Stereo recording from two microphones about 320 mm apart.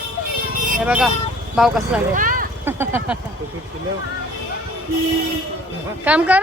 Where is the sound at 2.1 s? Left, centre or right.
Right.